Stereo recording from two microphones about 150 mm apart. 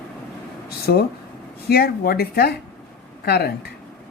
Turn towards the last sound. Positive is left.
turn(degrees=90)